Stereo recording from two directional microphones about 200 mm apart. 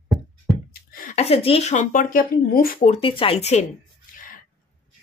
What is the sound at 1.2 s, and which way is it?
Speech, 30° left (ahead or behind).